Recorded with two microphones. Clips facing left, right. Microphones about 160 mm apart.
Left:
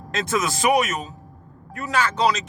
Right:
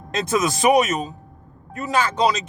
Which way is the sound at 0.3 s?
20° right (ahead or behind).